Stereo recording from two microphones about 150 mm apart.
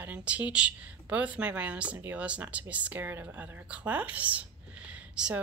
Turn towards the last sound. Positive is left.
turn(degrees=-10)  # may be behind; listen again after turning